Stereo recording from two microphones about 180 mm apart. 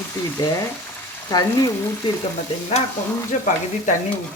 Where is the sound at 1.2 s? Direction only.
20° left (ahead or behind).